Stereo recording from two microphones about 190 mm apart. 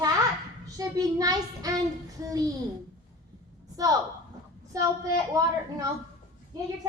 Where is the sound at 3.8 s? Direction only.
20° right (ahead or behind).